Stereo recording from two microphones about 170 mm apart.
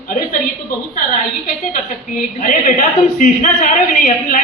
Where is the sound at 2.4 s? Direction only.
55° left (ahead or behind).